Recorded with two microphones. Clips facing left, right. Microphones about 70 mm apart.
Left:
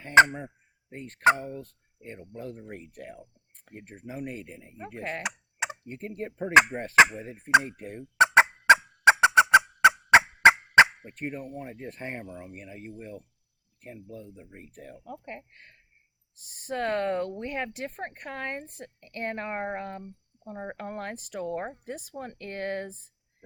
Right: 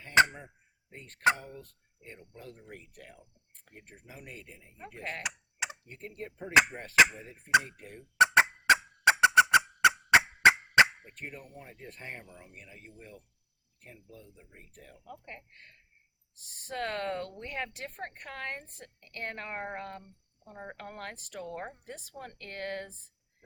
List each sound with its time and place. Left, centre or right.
0.0 s speech: left
8.4 s turkey: left
13.8 s speech: left
15.0 s speech: left